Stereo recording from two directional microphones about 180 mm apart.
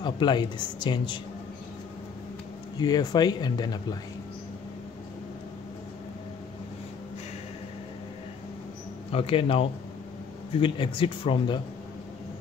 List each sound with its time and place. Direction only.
0.0 s speech: 25° left (ahead or behind)
2.8 s speech: 20° left (ahead or behind)
9.1 s speech: 30° left (ahead or behind)